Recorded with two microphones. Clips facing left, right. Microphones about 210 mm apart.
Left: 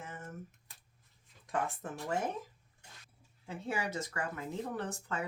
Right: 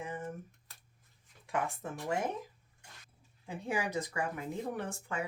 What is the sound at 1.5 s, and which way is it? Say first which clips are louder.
Speech: right 1 dB; 10° right (ahead or behind).